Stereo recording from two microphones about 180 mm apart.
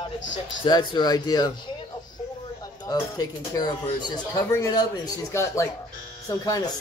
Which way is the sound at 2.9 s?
20° left (ahead or behind).